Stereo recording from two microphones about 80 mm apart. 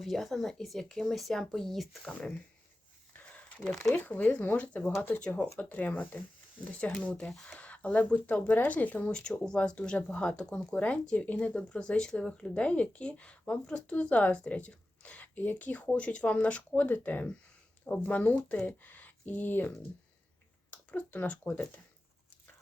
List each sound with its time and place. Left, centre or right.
0.0 s speech: centre
2.0 s speech: centre
3.1 s a sound: centre
3.6 s speech: centre
3.9 s speech: left